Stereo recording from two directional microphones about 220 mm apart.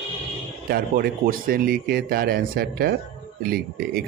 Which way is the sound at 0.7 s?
40° right (ahead or behind).